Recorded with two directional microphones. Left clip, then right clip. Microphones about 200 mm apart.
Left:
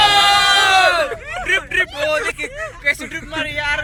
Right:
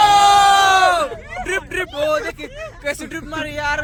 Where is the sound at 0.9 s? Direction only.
40° right (ahead or behind).